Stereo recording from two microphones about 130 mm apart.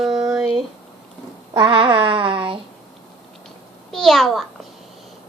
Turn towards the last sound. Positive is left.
turn(degrees=0)  # may be behind; listen again after turning